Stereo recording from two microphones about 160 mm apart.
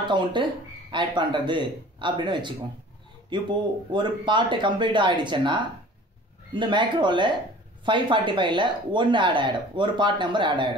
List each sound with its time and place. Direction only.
0.1 s speech: 30° right (ahead or behind)